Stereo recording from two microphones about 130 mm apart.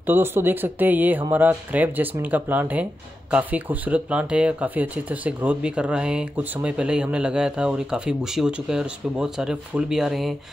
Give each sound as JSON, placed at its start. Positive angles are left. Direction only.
{"t": 0.0, "sound": "speech", "side_deg": -15}